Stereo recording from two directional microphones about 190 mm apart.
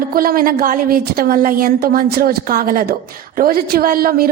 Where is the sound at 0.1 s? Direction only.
50° right (ahead or behind).